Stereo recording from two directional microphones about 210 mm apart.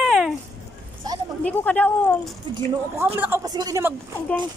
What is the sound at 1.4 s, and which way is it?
Speech, 5° left (ahead or behind).